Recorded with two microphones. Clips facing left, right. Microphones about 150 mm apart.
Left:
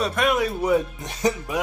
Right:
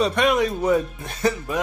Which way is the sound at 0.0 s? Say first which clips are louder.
Right 3 dB; centre (ahead or behind).